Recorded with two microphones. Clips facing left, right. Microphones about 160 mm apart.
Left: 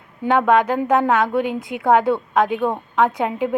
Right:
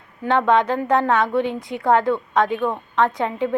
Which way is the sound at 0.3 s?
5° left (ahead or behind).